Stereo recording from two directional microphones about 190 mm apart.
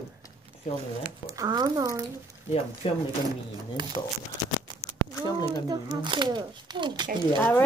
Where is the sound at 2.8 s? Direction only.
30° left (ahead or behind).